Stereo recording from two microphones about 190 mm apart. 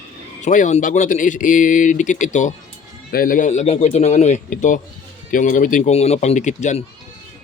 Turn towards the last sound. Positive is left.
turn(degrees=40)  # may be behind; listen again after turning